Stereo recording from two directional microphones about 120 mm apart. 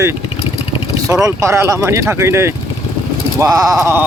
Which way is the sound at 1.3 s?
20° right (ahead or behind).